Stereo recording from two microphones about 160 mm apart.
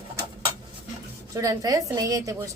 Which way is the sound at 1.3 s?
20° right (ahead or behind).